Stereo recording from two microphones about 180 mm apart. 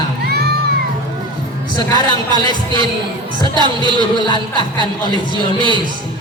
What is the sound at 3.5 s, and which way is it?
Speech, 25° right (ahead or behind).